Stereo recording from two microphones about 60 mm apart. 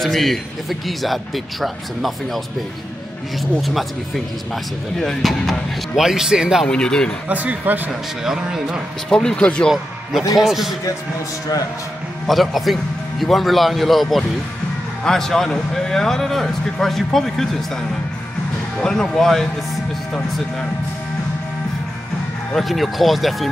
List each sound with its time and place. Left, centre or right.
0.0 s speech: centre
3.6 s speech: centre
6.7 s speech: centre
7.2 s speech: right
8.2 s speech: centre
9.1 s speech: centre
10.3 s speech: centre
12.3 s speech: centre
18.8 s speech: centre
22.6 s speech: centre